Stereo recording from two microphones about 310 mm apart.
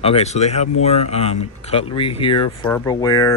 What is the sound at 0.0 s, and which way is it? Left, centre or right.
Speech, centre.